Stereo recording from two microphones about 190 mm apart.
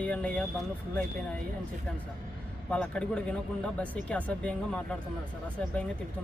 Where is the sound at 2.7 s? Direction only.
5° left (ahead or behind).